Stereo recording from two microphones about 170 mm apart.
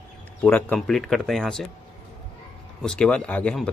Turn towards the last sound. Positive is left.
turn(degrees=5)  # may be behind; listen again after turning